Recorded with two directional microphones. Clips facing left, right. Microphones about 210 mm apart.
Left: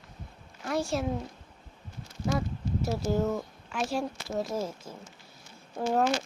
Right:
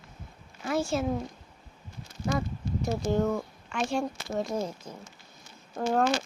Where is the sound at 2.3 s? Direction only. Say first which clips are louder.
Even; centre (ahead or behind).